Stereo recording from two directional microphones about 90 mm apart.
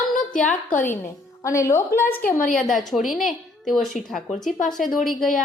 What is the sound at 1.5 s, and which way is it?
Speech, 35° left (ahead or behind).